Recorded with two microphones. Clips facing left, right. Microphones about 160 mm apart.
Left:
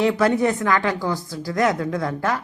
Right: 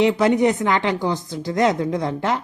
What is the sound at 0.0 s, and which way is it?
A woman's voice, 20° right (ahead or behind).